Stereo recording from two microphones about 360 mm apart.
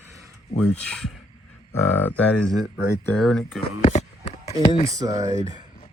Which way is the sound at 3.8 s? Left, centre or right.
Centre.